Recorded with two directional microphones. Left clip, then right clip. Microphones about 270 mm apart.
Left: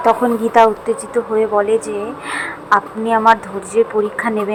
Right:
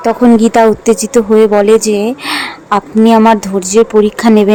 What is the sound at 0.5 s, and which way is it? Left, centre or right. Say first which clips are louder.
A woman's voice: right 4 dB; right.